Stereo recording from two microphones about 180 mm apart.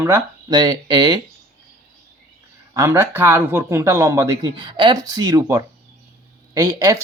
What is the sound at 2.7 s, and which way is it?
Speech, 15° right (ahead or behind).